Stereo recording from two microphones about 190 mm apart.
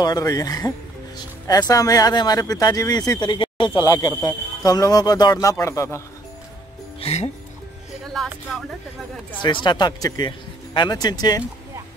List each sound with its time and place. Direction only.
0.0 s speech: 20° left (ahead or behind)
7.0 s speech: 35° left (ahead or behind)
8.1 s speech: centre (ahead or behind)
9.4 s speech: 25° left (ahead or behind)